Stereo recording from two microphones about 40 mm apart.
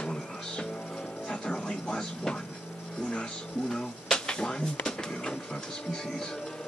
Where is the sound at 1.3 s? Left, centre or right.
Left.